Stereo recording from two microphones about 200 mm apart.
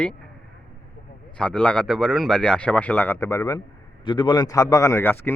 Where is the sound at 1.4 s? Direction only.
5° left (ahead or behind).